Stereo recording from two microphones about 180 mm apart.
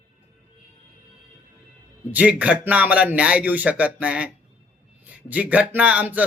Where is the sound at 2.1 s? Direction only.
5° right (ahead or behind).